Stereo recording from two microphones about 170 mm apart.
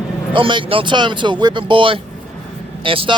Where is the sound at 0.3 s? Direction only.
30° right (ahead or behind).